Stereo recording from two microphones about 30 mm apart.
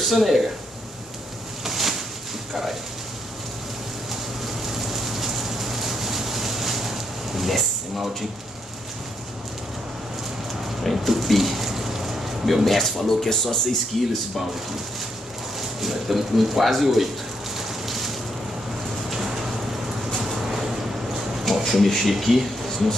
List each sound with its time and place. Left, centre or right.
0.0 s speech: centre
1.6 s a sound: centre
4.6 s vehicle: centre
10.8 s a sound: centre
12.6 s speech: centre
15.8 s speech: centre
17.6 s rain: centre
20.2 s vehicle: centre
21.5 s speech: centre
22.0 s speech: centre